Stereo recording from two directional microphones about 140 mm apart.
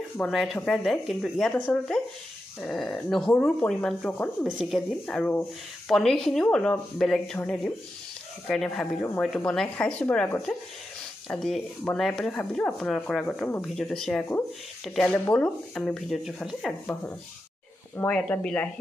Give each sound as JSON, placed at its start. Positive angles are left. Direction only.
{"t": 0.2, "sound": "speech", "side_deg": 0}
{"t": 4.5, "sound": "speech", "side_deg": 0}
{"t": 5.0, "sound": "speech", "side_deg": 10}
{"t": 11.2, "sound": "speech", "side_deg": 5}
{"t": 17.9, "sound": "speech", "side_deg": 10}